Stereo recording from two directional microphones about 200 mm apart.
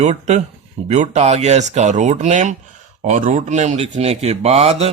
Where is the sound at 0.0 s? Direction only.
35° right (ahead or behind).